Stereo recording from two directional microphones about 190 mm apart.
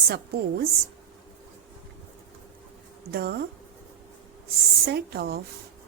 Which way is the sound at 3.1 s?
55° right (ahead or behind).